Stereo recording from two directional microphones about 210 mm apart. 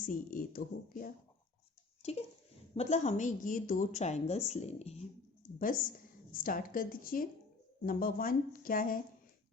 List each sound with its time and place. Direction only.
0.1 s a woman's voice: 40° left (ahead or behind)
2.0 s a sound: 30° left (ahead or behind)
2.7 s a woman's voice: 35° left (ahead or behind)
5.4 s a woman's voice: 40° left (ahead or behind)